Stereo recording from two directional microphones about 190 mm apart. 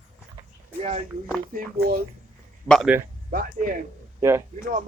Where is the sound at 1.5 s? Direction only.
50° right (ahead or behind).